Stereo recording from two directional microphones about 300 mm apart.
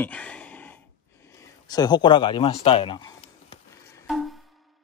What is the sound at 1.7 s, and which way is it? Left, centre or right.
Speech, centre.